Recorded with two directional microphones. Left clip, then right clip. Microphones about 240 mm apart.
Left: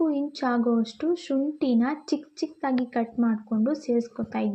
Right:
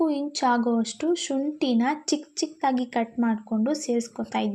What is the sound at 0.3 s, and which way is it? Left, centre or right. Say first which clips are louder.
Speech: right 5 dB; centre.